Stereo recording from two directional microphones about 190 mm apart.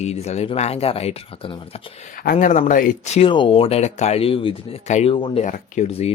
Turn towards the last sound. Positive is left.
turn(degrees=35)  # may be behind; listen again after turning